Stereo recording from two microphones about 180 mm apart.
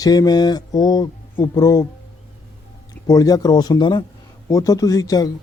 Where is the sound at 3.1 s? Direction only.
20° left (ahead or behind).